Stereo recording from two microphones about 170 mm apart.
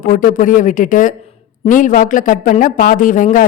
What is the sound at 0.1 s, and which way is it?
Speech, 50° left (ahead or behind).